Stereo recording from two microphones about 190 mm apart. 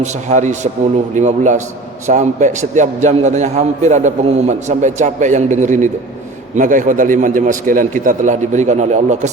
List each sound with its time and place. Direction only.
0.0 s a man's voice: 40° right (ahead or behind)